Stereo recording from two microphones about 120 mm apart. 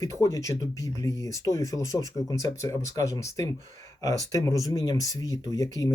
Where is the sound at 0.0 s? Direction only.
25° left (ahead or behind).